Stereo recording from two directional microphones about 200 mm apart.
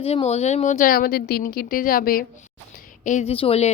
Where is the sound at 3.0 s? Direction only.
35° left (ahead or behind).